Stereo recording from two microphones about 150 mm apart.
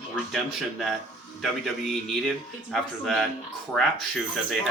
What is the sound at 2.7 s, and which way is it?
Speech, centre (ahead or behind).